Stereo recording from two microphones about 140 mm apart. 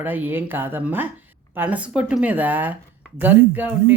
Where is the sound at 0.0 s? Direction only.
15° right (ahead or behind).